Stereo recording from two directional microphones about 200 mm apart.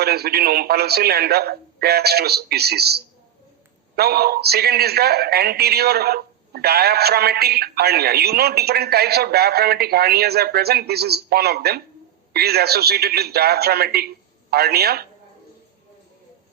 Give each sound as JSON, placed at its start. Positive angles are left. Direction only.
{"t": 0.0, "sound": "speech", "side_deg": -50}
{"t": 3.9, "sound": "speech", "side_deg": -50}